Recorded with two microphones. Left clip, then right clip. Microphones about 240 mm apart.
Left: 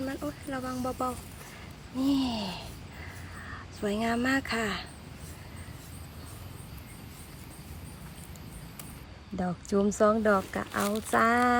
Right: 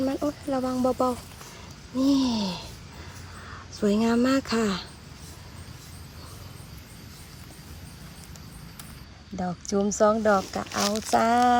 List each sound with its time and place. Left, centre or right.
0.0 s speech: centre
3.8 s speech: centre
9.3 s speech: centre